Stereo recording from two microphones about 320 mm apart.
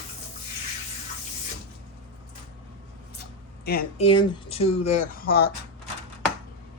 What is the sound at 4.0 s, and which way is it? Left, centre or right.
Speech, centre.